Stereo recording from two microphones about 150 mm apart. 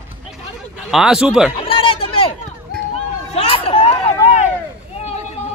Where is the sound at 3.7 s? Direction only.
40° left (ahead or behind).